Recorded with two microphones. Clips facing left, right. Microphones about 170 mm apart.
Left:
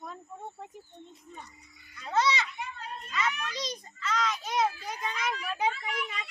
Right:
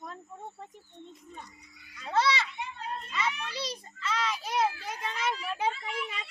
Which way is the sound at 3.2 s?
30° right (ahead or behind).